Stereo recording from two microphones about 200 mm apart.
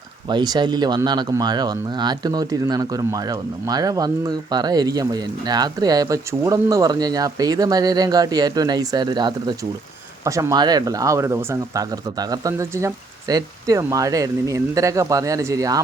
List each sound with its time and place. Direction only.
0.3 s speech: 20° right (ahead or behind)